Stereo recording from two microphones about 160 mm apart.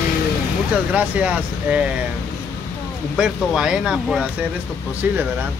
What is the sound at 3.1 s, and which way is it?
Speech, 5° right (ahead or behind).